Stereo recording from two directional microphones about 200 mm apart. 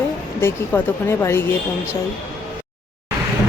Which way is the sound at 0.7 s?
10° left (ahead or behind).